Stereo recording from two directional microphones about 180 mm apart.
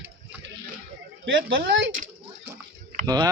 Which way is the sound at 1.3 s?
90° right.